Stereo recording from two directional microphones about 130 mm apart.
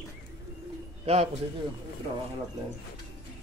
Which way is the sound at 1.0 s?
55° right (ahead or behind).